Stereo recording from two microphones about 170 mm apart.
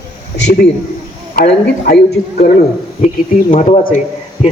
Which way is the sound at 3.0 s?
50° left (ahead or behind).